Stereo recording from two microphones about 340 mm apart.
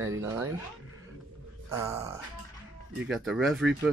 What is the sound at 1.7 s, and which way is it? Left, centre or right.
Speech, centre.